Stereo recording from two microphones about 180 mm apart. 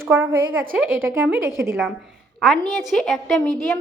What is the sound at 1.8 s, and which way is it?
A woman's voice, centre (ahead or behind).